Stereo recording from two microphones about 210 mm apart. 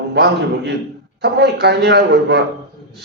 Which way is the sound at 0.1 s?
50° right (ahead or behind).